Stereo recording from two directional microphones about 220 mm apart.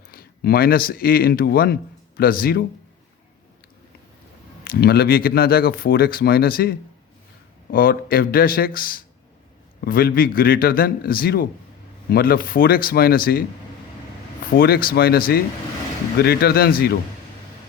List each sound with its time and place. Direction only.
0.1 s speech: 45° left (ahead or behind)
4.6 s speech: 45° left (ahead or behind)
14.5 s speech: 45° left (ahead or behind)